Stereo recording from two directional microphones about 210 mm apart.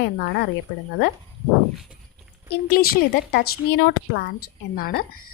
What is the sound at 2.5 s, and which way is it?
A woman's voice, 45° left (ahead or behind).